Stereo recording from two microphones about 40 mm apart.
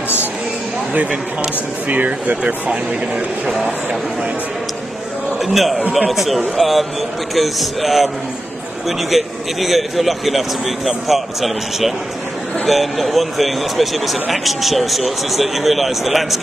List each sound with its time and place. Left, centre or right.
1.9 s speech: right
5.4 s a man's voice: centre